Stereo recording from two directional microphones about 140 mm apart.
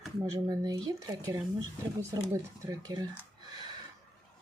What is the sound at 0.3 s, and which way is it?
Speech, 25° right (ahead or behind).